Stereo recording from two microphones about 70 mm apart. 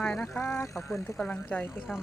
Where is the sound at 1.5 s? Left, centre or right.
Centre.